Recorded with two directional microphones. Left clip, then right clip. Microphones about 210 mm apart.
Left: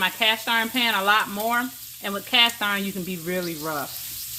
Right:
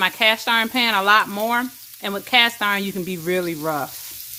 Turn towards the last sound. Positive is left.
turn(degrees=-40)  # may be behind; listen again after turning